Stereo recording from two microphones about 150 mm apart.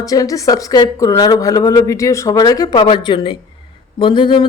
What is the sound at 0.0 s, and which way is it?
Speech, 25° left (ahead or behind).